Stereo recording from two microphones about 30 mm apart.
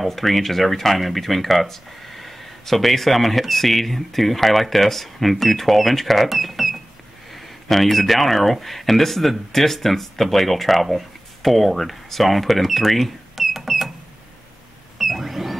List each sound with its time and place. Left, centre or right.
0.0 s speech: centre
15.0 s vehicle: centre